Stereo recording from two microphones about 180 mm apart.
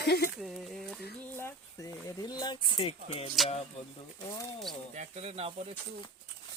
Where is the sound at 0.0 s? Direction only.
65° left (ahead or behind).